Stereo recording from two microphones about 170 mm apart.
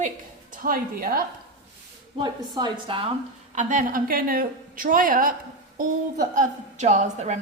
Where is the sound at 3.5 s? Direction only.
50° right (ahead or behind).